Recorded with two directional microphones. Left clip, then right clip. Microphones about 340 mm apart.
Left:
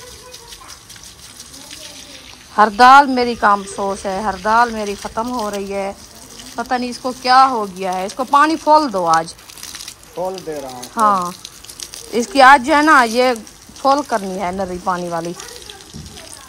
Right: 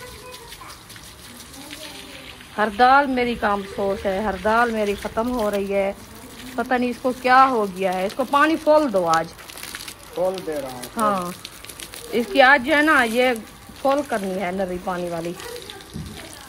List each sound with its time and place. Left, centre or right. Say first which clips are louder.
2.5 s speech: left 8 dB; centre
4.2 s speech: left 6 dB; centre
11.0 s speech: left 7 dB; centre